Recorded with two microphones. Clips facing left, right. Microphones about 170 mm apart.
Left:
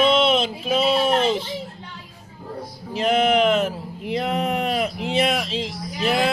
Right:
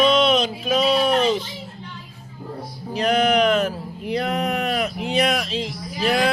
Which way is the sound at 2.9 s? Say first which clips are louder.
Even; 25° left (ahead or behind).